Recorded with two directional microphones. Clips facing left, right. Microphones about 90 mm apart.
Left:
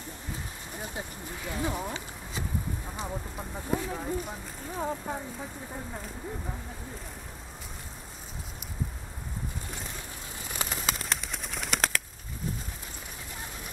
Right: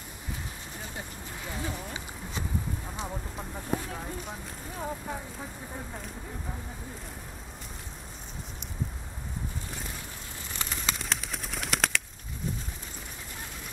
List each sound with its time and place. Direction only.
1.6 s speech: 15° left (ahead or behind)
3.0 s speech: centre (ahead or behind)
10.6 s bird: 5° left (ahead or behind)